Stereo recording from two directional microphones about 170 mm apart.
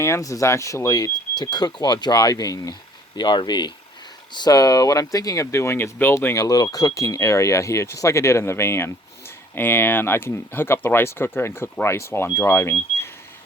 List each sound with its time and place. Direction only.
0.0 s speech: 20° left (ahead or behind)